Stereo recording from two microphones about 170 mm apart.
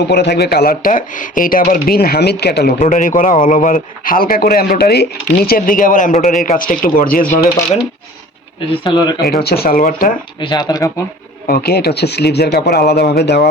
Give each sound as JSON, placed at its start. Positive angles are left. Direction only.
{"t": 0.1, "sound": "speech", "side_deg": 75}
{"t": 2.7, "sound": "speech", "side_deg": 50}
{"t": 5.5, "sound": "speech", "side_deg": 55}
{"t": 8.7, "sound": "speech", "side_deg": 30}
{"t": 9.4, "sound": "speech", "side_deg": 65}
{"t": 10.4, "sound": "speech", "side_deg": 25}
{"t": 11.4, "sound": "speech", "side_deg": 60}